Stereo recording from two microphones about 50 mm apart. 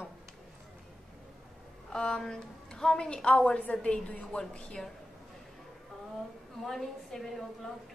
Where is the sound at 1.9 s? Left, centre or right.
Centre.